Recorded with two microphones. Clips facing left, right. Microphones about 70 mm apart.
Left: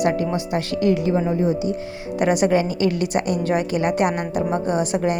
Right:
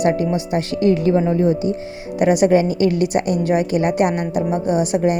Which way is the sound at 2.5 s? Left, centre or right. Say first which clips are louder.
Right 4 dB; right.